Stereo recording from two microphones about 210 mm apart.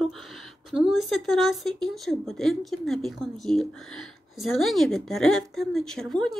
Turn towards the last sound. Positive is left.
turn(degrees=0)  # may be behind; listen again after turning